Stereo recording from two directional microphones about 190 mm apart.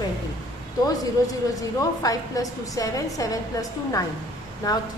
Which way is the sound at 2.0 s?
20° left (ahead or behind).